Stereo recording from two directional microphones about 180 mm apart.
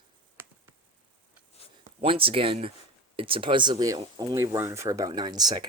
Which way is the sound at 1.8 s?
30° right (ahead or behind).